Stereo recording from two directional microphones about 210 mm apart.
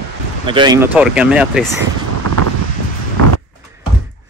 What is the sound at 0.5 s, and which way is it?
Speech, 20° right (ahead or behind).